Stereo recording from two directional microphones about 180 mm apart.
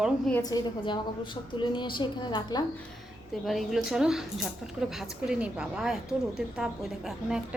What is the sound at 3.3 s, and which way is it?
A woman's voice, centre (ahead or behind).